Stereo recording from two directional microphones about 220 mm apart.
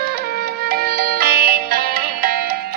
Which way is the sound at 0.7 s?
45° right (ahead or behind).